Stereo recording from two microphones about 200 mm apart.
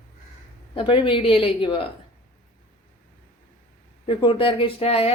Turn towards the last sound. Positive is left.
turn(degrees=30)  # may be behind; listen again after turning